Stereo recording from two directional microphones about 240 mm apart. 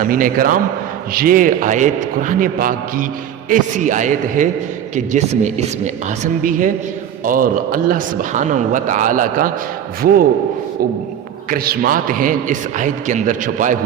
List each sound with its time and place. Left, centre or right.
0.0 s a man's voice: right
11.5 s a man's voice: right